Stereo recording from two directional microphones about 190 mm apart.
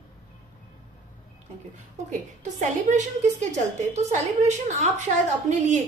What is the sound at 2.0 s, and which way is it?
A woman's voice, 40° right (ahead or behind).